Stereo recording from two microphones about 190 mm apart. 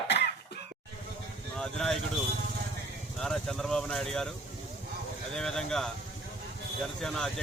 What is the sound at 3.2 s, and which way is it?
Speech, centre (ahead or behind).